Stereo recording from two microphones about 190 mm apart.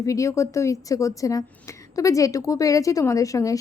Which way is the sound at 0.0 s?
15° left (ahead or behind).